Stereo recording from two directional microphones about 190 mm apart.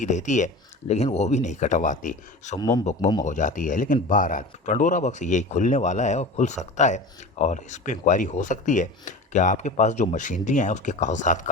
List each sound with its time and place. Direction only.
0.0 s speech: 40° left (ahead or behind)
2.6 s a man's voice: 20° left (ahead or behind)
3.2 s speech: 40° left (ahead or behind)